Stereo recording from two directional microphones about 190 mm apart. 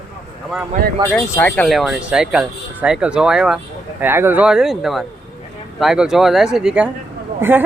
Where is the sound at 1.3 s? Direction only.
10° left (ahead or behind).